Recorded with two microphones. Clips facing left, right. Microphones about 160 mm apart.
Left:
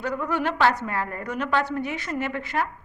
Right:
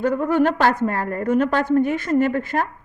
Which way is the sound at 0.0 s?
50° right (ahead or behind).